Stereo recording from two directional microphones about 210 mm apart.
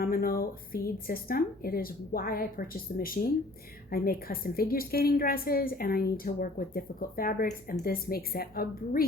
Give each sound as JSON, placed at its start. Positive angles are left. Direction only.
{"t": 0.0, "sound": "a woman's voice", "side_deg": 45}